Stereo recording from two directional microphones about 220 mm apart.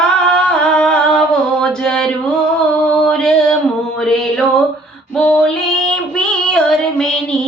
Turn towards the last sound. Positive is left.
turn(degrees=5)  # may be behind; listen again after turning